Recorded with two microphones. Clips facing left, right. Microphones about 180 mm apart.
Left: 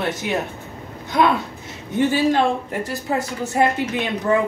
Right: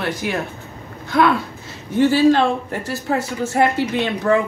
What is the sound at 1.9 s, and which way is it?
Speech, 20° left (ahead or behind).